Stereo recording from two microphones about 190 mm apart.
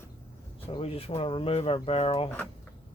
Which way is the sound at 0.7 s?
30° left (ahead or behind).